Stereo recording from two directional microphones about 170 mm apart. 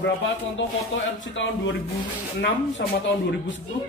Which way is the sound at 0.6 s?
90° left.